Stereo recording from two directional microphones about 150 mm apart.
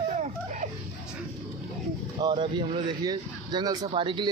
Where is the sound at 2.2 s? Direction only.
30° right (ahead or behind).